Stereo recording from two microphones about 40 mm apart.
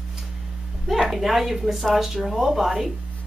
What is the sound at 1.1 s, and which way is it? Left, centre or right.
Speech, centre.